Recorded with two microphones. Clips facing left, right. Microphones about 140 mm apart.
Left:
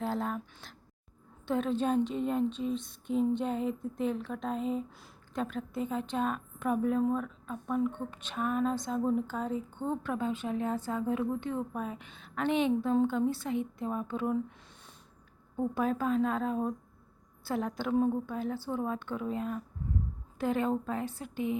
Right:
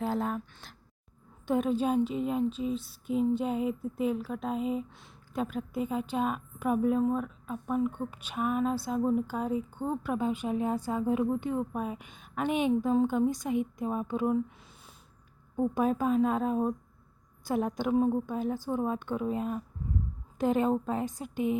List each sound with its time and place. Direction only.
0.0 s speech: centre (ahead or behind)
1.5 s speech: 15° right (ahead or behind)
15.5 s speech: 15° right (ahead or behind)